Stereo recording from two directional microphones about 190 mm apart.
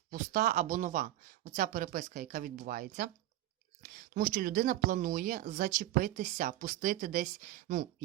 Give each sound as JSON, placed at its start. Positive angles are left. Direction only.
{"t": 0.1, "sound": "speech", "side_deg": -45}